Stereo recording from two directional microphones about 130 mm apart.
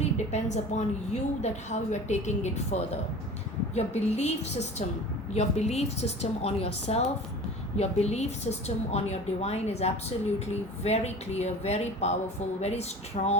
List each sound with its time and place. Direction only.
0.0 s a woman's voice: 60° left (ahead or behind)